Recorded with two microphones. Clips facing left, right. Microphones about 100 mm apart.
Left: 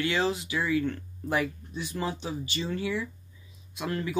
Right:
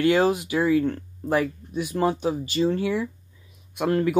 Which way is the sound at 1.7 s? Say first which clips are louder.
Right 9 dB; 55° right (ahead or behind).